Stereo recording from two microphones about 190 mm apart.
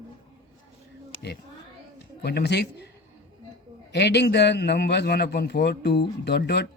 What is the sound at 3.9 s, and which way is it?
A man's voice, 60° left (ahead or behind).